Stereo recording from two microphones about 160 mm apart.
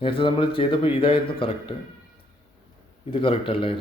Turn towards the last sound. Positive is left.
turn(degrees=35)  # may be behind; listen again after turning